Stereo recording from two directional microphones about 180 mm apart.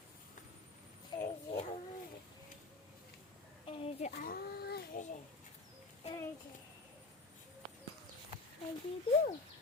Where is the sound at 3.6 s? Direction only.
35° left (ahead or behind).